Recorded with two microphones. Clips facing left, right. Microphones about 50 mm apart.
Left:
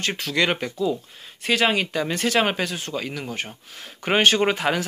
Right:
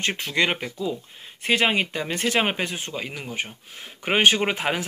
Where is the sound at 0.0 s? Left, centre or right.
Right.